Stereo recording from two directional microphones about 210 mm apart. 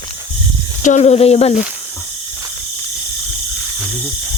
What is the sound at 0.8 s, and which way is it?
Speech, 35° left (ahead or behind).